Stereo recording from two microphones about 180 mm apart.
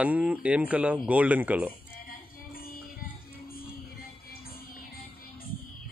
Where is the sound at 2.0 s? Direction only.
55° left (ahead or behind).